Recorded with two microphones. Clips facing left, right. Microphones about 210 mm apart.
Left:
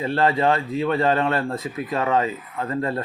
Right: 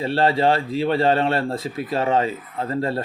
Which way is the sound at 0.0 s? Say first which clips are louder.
Right 1 dB; 30° right (ahead or behind).